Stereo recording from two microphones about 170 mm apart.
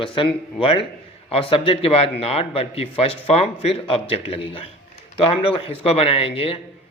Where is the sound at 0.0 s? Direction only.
30° left (ahead or behind).